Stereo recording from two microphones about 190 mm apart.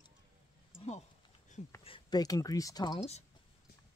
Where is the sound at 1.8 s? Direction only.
25° left (ahead or behind).